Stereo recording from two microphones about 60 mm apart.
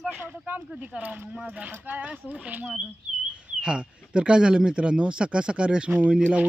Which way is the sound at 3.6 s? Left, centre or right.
Centre.